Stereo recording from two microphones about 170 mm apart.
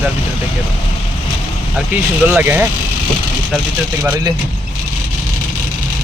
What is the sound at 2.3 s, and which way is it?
Speech, 10° right (ahead or behind).